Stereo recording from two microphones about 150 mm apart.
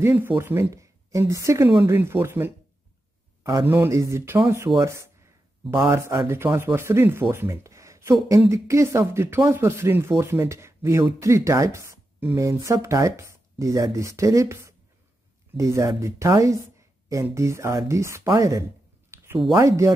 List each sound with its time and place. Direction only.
0.0 s speech: 15° right (ahead or behind)
3.6 s speech: 15° right (ahead or behind)
19.0 s a sound: 15° right (ahead or behind)
19.3 s speech: 30° right (ahead or behind)